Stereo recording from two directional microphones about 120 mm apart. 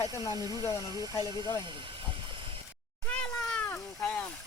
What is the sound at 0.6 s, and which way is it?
Speech, 25° left (ahead or behind).